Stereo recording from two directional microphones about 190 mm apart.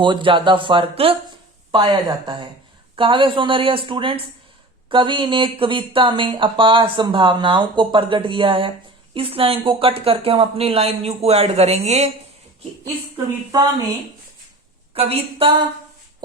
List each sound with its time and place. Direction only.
0.0 s speech: 25° right (ahead or behind)
14.9 s speech: 30° right (ahead or behind)